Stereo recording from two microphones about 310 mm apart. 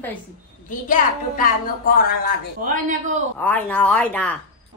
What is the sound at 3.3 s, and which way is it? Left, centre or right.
A woman's voice, centre.